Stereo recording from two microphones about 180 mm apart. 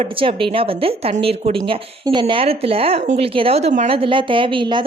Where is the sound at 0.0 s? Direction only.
30° right (ahead or behind).